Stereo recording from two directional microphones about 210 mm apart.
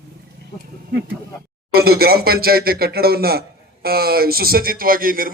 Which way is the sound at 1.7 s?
45° right (ahead or behind).